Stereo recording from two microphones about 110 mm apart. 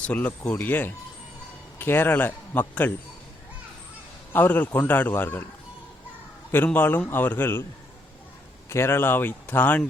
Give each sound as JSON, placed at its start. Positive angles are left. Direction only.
{"t": 0.0, "sound": "a man's voice", "side_deg": 15}
{"t": 4.3, "sound": "a man's voice", "side_deg": 15}
{"t": 6.7, "sound": "a man's voice", "side_deg": 15}
{"t": 8.7, "sound": "a man's voice", "side_deg": 25}